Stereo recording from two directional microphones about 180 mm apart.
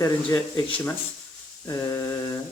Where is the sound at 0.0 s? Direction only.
20° left (ahead or behind).